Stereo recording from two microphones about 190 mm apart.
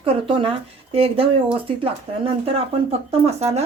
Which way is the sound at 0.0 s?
30° right (ahead or behind).